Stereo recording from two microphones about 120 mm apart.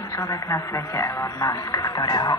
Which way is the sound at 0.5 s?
25° left (ahead or behind).